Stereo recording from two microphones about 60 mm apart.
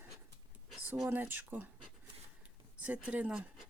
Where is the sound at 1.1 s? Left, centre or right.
Right.